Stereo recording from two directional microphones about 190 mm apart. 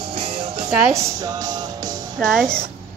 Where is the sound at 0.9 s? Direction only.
20° right (ahead or behind).